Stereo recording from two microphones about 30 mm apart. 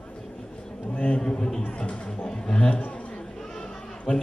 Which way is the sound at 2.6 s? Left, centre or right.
Left.